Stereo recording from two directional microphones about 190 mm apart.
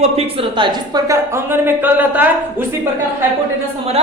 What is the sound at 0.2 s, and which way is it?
A woman's voice, 30° right (ahead or behind).